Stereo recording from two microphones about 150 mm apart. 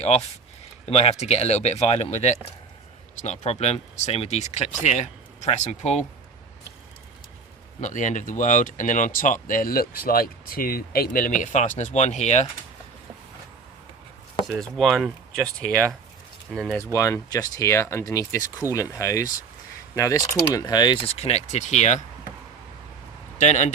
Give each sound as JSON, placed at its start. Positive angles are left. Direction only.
{"t": 0.9, "sound": "speech", "side_deg": 40}
{"t": 7.8, "sound": "speech", "side_deg": 55}
{"t": 14.4, "sound": "speech", "side_deg": 0}
{"t": 16.7, "sound": "speech", "side_deg": 20}
{"t": 23.4, "sound": "speech", "side_deg": 50}